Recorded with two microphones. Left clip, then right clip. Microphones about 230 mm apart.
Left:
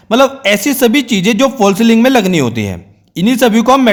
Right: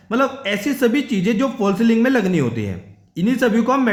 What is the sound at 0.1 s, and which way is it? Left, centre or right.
A man's voice, left.